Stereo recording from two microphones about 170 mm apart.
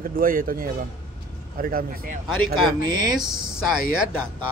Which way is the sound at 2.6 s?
25° right (ahead or behind).